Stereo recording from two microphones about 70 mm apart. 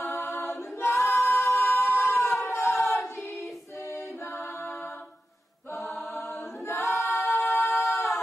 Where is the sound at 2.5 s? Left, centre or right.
Left.